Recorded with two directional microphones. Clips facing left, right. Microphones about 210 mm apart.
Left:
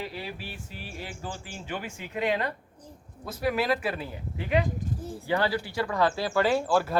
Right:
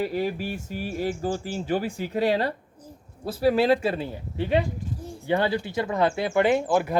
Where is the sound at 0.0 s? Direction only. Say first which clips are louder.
Right 10 dB; 45° right (ahead or behind).